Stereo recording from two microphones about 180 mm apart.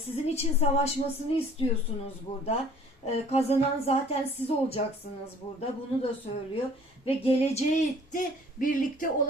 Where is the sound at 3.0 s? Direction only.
35° left (ahead or behind).